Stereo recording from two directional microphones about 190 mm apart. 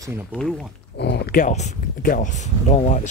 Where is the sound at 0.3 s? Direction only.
Centre (ahead or behind).